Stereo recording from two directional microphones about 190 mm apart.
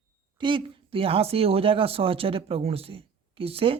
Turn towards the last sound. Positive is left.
turn(degrees=-30)  # may be behind; listen again after turning